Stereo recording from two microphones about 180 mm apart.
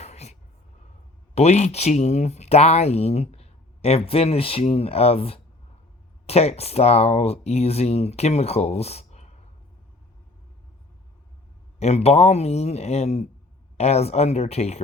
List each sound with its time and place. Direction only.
0.0 s a sound: 40° left (ahead or behind)
1.4 s speech: 35° left (ahead or behind)
11.8 s speech: 40° left (ahead or behind)